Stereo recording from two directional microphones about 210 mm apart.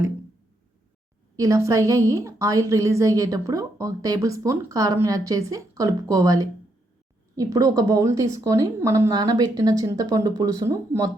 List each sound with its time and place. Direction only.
1.4 s a woman's voice: 15° right (ahead or behind)